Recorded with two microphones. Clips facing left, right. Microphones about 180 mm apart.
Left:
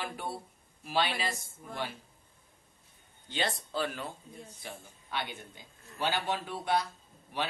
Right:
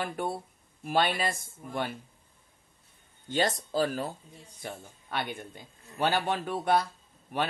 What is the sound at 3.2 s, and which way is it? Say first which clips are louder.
Speech: right 6 dB; 45° right (ahead or behind).